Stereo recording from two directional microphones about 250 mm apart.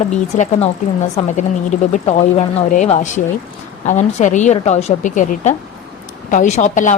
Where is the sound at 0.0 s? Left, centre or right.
Left.